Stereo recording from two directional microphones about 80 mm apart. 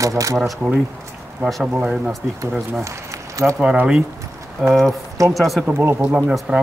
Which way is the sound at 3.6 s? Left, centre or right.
Centre.